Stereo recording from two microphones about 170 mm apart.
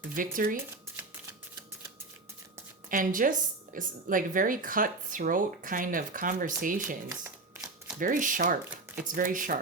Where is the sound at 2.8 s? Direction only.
55° right (ahead or behind).